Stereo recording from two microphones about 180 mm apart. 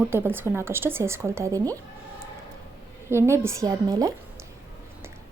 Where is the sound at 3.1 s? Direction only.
15° right (ahead or behind).